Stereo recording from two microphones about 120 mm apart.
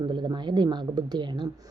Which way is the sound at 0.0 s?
40° right (ahead or behind).